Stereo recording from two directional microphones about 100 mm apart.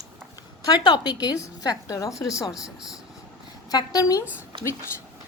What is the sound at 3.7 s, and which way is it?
Speech, 40° left (ahead or behind).